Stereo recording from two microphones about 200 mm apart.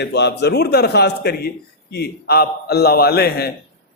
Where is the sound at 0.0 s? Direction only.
55° left (ahead or behind).